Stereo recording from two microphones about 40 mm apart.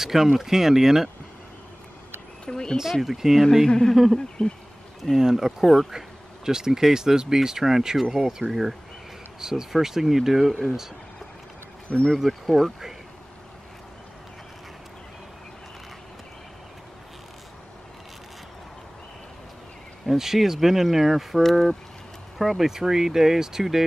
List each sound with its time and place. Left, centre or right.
0.0 s speech: centre
2.4 s a sound: centre
2.8 s speech: centre
3.6 s speech: centre
3.9 s speech: centre
4.4 s speech: centre
5.1 s speech: centre
11.9 s speech: left
12.4 s speech: centre
20.1 s speech: centre
22.6 s speech: centre